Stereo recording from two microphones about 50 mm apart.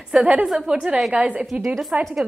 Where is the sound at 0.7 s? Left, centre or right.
Right.